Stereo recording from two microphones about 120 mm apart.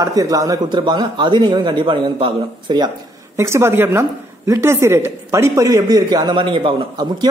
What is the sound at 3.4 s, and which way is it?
A woman's voice, 20° right (ahead or behind).